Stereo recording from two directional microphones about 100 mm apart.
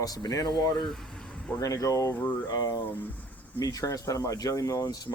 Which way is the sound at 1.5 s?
35° left (ahead or behind).